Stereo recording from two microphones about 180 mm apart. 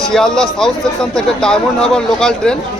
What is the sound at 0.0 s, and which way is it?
A man's voice, 5° left (ahead or behind).